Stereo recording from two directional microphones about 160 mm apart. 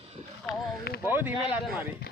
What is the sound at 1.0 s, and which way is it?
Speech, 15° right (ahead or behind).